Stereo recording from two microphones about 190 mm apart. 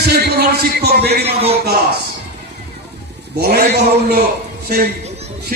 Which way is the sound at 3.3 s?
55° right (ahead or behind).